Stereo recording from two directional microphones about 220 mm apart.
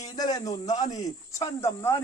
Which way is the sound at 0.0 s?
15° left (ahead or behind).